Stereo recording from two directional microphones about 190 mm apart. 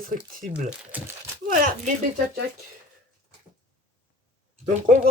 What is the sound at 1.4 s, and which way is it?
Speech, 45° right (ahead or behind).